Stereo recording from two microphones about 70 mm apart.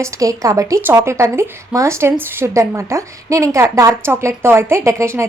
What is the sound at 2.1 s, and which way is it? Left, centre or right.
A woman's voice, right.